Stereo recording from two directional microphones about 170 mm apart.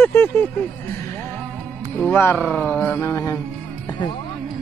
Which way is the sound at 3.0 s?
20° left (ahead or behind).